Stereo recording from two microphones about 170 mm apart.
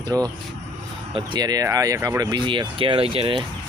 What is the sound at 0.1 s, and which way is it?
Speech, 20° right (ahead or behind).